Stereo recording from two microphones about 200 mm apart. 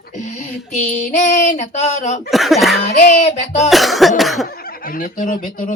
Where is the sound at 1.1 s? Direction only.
35° left (ahead or behind).